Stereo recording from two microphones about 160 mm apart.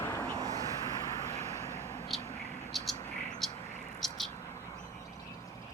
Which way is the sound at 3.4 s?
Centre (ahead or behind).